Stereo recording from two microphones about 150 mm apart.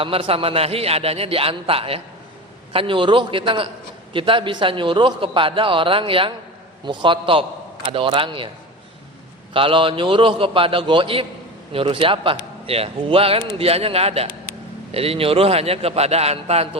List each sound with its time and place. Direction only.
0.0 s a man's voice: 40° right (ahead or behind)
9.5 s a man's voice: 35° right (ahead or behind)